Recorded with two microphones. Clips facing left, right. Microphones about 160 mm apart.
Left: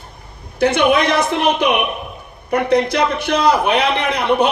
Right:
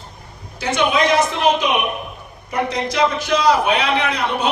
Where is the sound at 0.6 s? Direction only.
60° left (ahead or behind).